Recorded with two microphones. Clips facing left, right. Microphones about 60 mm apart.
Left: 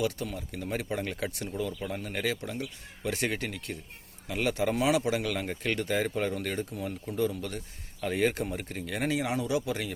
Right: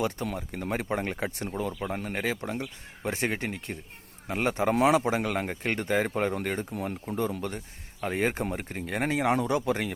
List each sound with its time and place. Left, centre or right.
0.0 s speech: right
6.7 s speech: right
8.0 s speech: right